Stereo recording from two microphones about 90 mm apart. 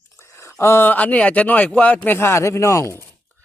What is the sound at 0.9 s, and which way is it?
Speech, 15° left (ahead or behind).